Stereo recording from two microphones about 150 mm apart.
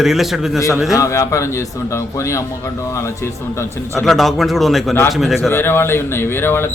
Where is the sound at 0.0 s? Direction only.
Centre (ahead or behind).